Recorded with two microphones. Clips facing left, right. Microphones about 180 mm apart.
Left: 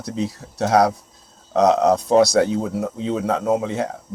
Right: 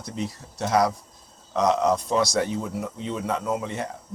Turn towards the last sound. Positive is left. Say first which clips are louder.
# left 7 dB
turn(degrees=90)